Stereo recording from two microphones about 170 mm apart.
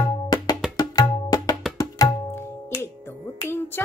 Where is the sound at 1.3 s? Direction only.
25° left (ahead or behind).